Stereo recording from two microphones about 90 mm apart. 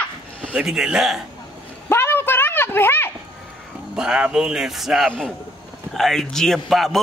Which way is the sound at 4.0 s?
10° right (ahead or behind).